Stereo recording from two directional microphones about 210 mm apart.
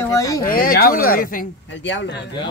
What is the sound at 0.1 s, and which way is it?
Speech, 15° left (ahead or behind).